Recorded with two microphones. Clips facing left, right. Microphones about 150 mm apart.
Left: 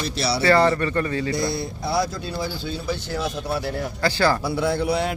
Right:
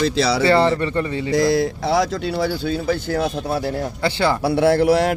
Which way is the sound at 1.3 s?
90° right.